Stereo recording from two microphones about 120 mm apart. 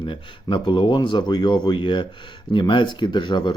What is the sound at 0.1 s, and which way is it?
Speech, 40° left (ahead or behind).